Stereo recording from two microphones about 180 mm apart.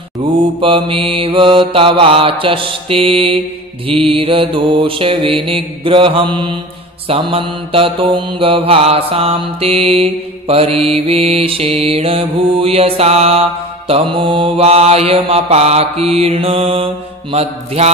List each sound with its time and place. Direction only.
0.2 s mantra: 30° right (ahead or behind)